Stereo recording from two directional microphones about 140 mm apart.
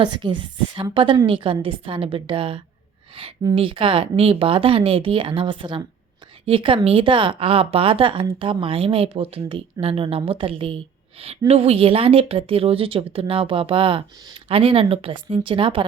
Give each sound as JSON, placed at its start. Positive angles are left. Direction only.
{"t": 0.0, "sound": "a woman's voice", "side_deg": -35}